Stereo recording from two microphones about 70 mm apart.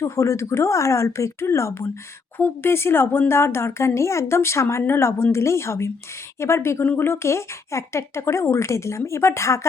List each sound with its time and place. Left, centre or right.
0.0 s speech: left